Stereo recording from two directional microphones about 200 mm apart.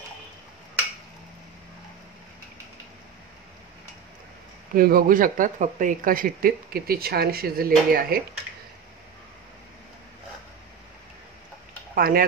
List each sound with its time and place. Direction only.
4.7 s speech: 45° right (ahead or behind)
11.9 s speech: 45° right (ahead or behind)